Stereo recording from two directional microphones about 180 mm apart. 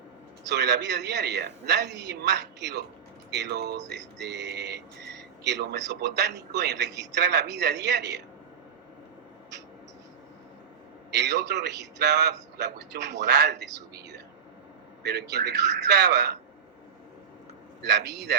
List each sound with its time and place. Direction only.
0.4 s music: 70° right (ahead or behind)
11.1 s music: 70° right (ahead or behind)
17.8 s music: 70° right (ahead or behind)